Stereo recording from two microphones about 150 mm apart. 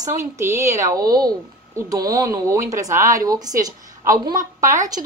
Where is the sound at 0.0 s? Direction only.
20° right (ahead or behind).